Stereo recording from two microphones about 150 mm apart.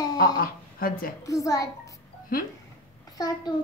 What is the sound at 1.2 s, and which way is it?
Speech, 20° left (ahead or behind).